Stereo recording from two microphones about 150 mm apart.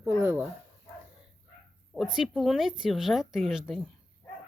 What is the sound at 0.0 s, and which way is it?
Dog, 15° right (ahead or behind).